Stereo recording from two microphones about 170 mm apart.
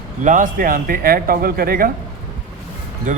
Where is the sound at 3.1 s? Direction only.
50° right (ahead or behind).